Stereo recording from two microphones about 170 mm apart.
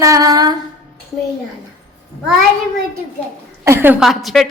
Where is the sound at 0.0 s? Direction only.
20° right (ahead or behind).